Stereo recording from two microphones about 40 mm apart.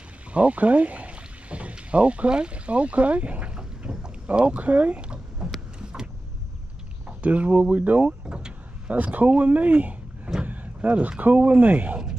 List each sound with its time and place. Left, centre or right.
0.3 s speech: right
3.5 s boat: right
4.6 s speech: right
5.0 s a sound: right
7.2 s speech: right
8.3 s vehicle: right
8.8 s speech: right